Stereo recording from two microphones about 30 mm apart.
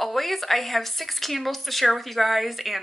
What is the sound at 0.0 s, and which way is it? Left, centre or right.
Speech, centre.